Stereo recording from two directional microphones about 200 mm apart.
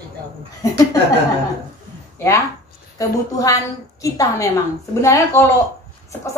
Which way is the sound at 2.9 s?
15° left (ahead or behind).